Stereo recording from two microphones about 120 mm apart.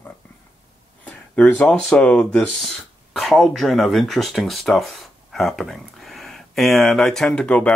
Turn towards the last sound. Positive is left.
turn(degrees=10)  # may be behind; listen again after turning